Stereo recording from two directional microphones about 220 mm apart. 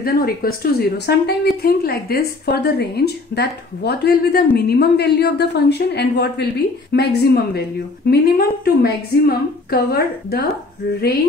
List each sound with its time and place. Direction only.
0.0 s speech: 40° left (ahead or behind)